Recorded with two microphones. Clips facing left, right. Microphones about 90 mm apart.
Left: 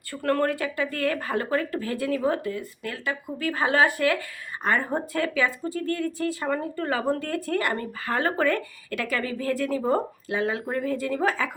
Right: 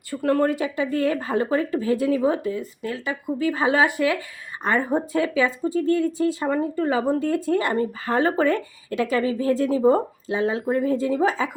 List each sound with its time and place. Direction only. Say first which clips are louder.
0.2 s speech: right 3 dB; 15° right (ahead or behind)